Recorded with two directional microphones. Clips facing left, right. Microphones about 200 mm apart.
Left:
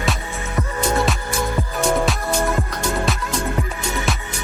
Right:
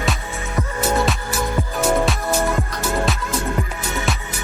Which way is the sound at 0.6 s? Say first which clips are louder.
Even; centre (ahead or behind).